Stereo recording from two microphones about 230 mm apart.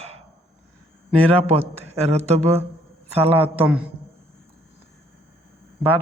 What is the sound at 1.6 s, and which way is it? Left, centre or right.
A man's voice, right.